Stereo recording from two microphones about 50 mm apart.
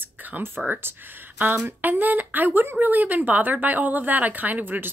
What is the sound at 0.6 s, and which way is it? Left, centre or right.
Speech, centre.